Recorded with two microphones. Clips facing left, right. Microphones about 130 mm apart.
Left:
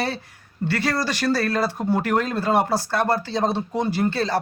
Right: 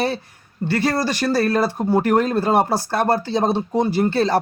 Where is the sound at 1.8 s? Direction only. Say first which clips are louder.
Right 6 dB; 35° right (ahead or behind).